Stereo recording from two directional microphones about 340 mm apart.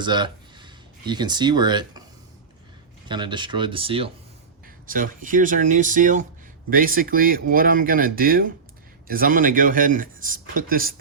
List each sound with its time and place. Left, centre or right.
0.0 s speech: centre
3.1 s speech: centre